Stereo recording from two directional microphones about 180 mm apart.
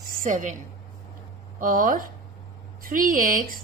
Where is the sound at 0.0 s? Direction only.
50° right (ahead or behind).